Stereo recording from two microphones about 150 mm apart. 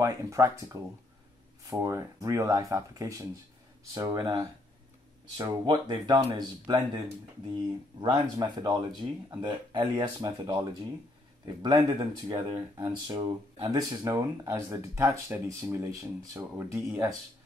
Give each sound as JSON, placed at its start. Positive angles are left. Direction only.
{"t": 0.0, "sound": "speech", "side_deg": -20}
{"t": 8.0, "sound": "speech", "side_deg": -30}